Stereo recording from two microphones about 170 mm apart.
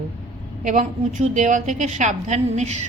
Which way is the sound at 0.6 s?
45° right (ahead or behind).